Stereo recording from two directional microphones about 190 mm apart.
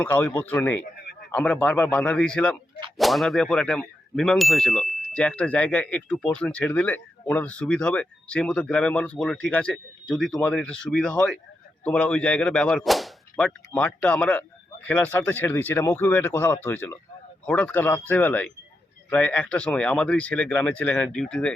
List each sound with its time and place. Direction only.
0.0 s whip: 10° left (ahead or behind)
3.0 s ding: centre (ahead or behind)
11.8 s whip: 5° left (ahead or behind)
19.1 s ding: 5° left (ahead or behind)